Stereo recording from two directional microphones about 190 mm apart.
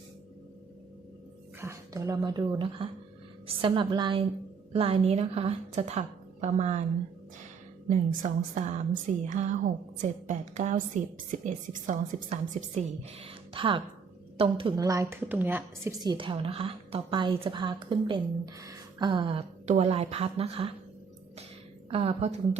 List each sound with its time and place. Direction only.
1.6 s a woman's voice: 15° right (ahead or behind); by 6.8 s 35° right (ahead or behind)
7.9 s a woman's voice: 40° right (ahead or behind)
21.8 s a woman's voice: 30° right (ahead or behind)